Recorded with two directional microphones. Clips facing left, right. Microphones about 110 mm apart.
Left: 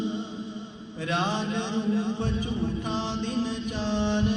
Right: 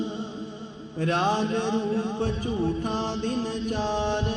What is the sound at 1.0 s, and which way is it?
Mantra, 45° right (ahead or behind).